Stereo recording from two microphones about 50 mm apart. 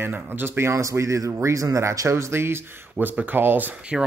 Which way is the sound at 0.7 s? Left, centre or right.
Right.